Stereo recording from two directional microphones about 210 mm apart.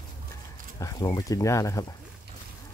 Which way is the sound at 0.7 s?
15° left (ahead or behind).